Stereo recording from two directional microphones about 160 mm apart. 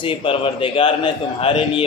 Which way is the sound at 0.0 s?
35° left (ahead or behind).